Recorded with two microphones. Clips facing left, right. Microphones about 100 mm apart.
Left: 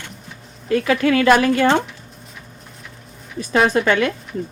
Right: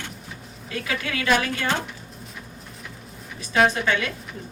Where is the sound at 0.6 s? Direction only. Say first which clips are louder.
Left 13 dB; 45° left (ahead or behind); by 1.7 s 65° left (ahead or behind).